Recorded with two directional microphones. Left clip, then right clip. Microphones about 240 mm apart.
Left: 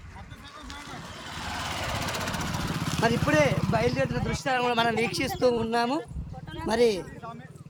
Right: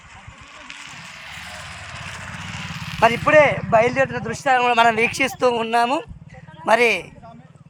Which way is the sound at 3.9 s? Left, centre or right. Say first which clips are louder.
Right 7 dB; centre.